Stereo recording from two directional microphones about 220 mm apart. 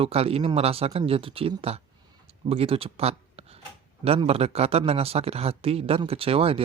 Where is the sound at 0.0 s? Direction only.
25° right (ahead or behind).